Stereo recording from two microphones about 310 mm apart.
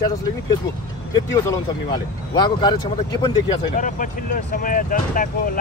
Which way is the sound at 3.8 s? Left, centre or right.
Left.